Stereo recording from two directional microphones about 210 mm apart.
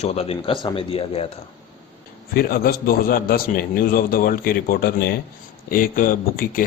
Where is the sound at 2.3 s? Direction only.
45° left (ahead or behind).